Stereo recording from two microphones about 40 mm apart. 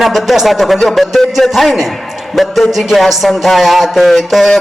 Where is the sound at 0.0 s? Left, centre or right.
Centre.